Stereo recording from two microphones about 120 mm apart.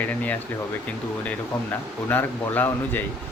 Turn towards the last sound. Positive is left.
turn(degrees=15)  # may be behind; listen again after turning